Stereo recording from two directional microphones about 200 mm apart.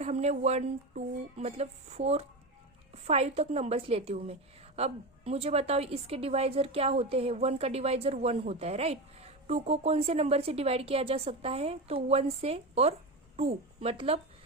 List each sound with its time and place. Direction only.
0.0 s a woman's voice: 35° right (ahead or behind)